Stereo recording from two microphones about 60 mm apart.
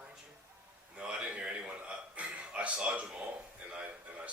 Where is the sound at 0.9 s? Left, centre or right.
Right.